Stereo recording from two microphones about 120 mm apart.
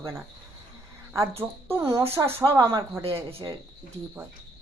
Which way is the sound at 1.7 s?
25° right (ahead or behind).